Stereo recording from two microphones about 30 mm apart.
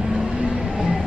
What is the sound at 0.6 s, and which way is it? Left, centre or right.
Vehicle, right.